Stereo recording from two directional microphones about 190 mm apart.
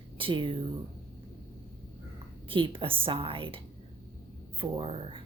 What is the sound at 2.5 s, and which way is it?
Speech, 30° right (ahead or behind).